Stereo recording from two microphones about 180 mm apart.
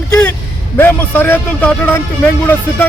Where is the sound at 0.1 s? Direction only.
10° left (ahead or behind).